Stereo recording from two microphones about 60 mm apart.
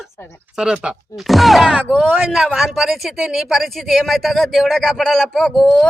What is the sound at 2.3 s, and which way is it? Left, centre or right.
Speech, centre.